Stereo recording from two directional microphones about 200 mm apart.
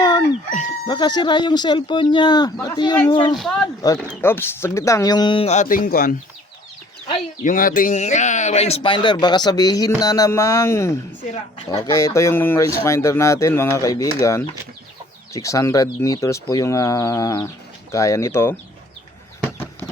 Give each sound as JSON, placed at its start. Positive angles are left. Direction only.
{"t": 0.0, "sound": "chicken", "side_deg": 20}
{"t": 0.9, "sound": "speech", "side_deg": 20}
{"t": 3.3, "sound": "speech", "side_deg": 0}